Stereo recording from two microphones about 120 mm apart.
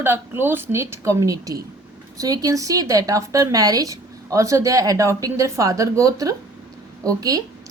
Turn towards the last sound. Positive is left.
turn(degrees=-30)  # may be behind; listen again after turning